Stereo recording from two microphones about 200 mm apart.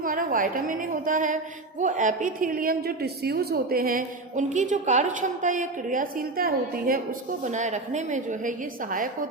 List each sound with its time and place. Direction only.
0.0 s a woman's voice: 45° right (ahead or behind)